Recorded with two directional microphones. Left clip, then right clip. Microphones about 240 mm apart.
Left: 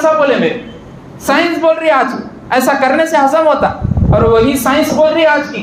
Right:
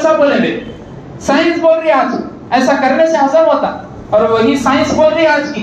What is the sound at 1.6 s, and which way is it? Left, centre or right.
A man's voice, left.